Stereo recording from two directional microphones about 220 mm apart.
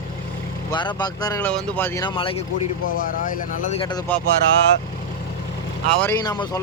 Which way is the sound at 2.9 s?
40° left (ahead or behind).